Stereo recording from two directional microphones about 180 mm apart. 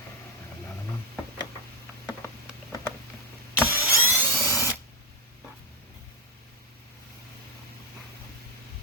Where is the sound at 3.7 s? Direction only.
10° right (ahead or behind).